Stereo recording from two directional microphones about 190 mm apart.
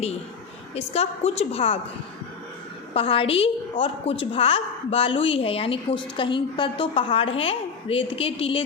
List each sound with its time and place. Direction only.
0.8 s a woman's voice: 35° left (ahead or behind)
2.9 s a woman's voice: 30° left (ahead or behind)